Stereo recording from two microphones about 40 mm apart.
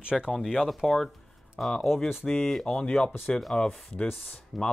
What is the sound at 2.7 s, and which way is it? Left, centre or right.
Speech, centre.